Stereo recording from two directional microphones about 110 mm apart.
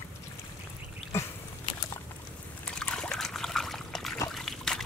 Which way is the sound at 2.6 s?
5° left (ahead or behind).